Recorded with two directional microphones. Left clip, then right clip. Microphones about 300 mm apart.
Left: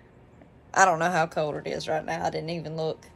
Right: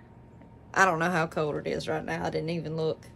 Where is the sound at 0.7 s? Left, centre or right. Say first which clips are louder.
Left 3 dB; centre.